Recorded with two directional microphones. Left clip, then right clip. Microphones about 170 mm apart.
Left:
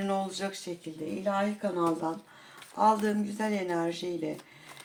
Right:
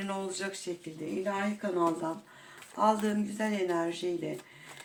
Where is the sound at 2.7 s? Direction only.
40° left (ahead or behind).